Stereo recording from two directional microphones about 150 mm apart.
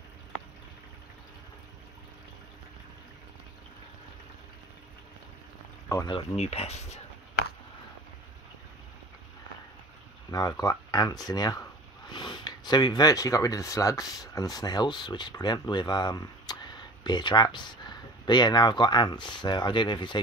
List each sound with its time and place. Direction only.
5.9 s speech: 25° left (ahead or behind)
6.3 s speech: 45° left (ahead or behind)
10.3 s speech: 25° left (ahead or behind)